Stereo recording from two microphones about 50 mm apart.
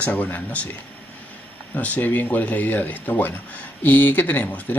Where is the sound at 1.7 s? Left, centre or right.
Left.